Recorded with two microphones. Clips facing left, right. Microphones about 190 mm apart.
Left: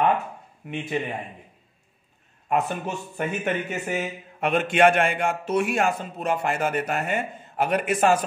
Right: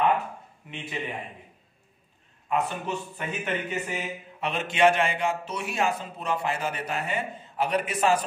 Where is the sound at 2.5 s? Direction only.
50° left (ahead or behind).